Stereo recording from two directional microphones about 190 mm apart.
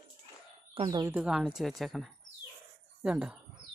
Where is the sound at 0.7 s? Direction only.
25° right (ahead or behind).